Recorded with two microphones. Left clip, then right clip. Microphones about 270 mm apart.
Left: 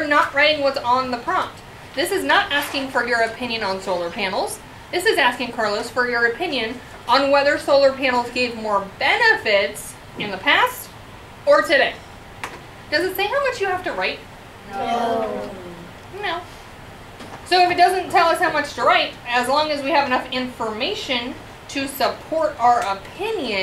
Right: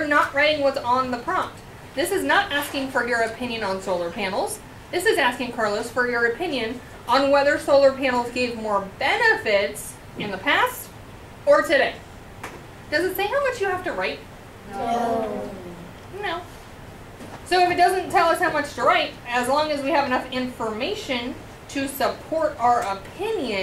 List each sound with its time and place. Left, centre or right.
0.0 s a woman's voice: centre
12.9 s a woman's voice: centre
15.0 s speech: centre
17.5 s a woman's voice: centre